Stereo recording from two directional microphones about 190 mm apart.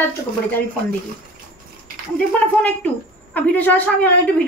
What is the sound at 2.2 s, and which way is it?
A woman's voice, 5° left (ahead or behind).